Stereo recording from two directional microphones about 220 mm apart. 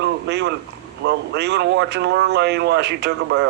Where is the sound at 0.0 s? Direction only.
50° right (ahead or behind).